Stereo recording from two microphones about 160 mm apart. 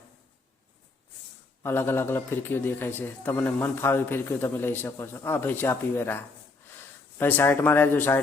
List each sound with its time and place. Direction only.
1.6 s a man's voice: 15° left (ahead or behind)